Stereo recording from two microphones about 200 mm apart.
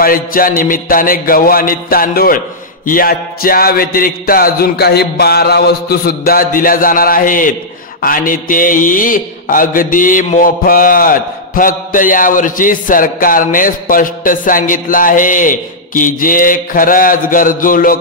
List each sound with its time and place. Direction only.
0.0 s mantra: 45° left (ahead or behind)